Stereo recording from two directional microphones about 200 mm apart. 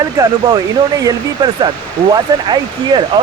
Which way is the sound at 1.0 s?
20° right (ahead or behind).